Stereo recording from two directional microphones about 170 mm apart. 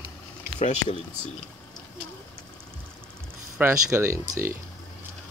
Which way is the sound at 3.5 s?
15° right (ahead or behind).